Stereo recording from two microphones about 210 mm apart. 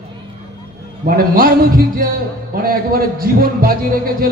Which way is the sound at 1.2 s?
45° right (ahead or behind).